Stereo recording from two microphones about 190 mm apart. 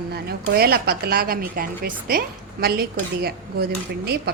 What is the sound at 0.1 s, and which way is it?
A woman's voice, 55° right (ahead or behind).